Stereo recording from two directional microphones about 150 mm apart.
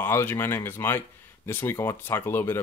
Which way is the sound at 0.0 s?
15° left (ahead or behind).